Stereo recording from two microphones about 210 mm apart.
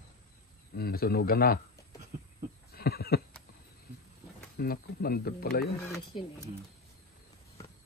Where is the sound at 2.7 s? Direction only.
50° left (ahead or behind).